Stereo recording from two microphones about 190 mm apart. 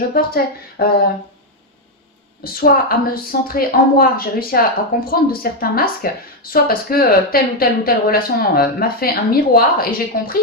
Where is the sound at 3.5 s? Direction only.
50° left (ahead or behind).